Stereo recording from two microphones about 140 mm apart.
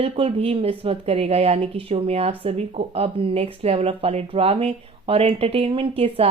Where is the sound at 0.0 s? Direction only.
45° right (ahead or behind).